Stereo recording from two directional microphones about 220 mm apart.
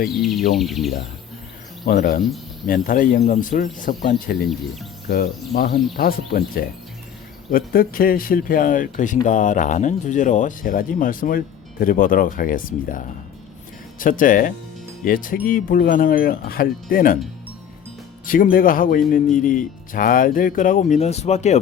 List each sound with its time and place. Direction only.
0.1 s speech: centre (ahead or behind)
1.9 s speech: 40° left (ahead or behind)
14.0 s speech: 40° left (ahead or behind)
18.3 s speech: 40° left (ahead or behind)